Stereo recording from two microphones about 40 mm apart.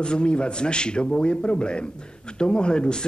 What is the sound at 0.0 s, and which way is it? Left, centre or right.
Speech, left.